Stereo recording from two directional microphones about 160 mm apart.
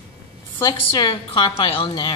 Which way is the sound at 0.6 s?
25° left (ahead or behind).